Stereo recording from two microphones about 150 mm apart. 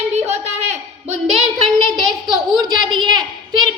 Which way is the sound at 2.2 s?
30° right (ahead or behind).